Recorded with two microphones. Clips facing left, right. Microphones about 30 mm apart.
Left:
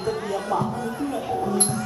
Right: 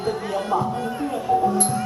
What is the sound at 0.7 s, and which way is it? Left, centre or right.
Music, right.